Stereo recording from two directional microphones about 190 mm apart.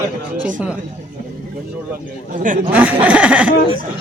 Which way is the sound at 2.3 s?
45° right (ahead or behind).